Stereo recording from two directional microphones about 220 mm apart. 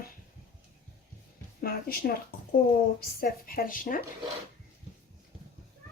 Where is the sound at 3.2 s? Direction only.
40° left (ahead or behind).